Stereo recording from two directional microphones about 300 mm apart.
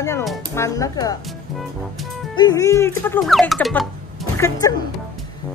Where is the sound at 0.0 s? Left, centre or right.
Centre.